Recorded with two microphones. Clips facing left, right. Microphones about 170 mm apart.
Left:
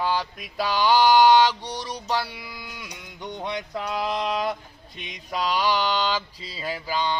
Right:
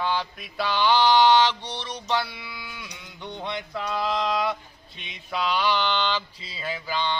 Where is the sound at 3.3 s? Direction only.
15° left (ahead or behind).